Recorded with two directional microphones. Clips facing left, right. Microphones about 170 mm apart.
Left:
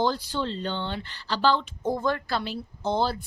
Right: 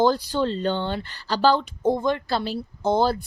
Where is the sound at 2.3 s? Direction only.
30° right (ahead or behind).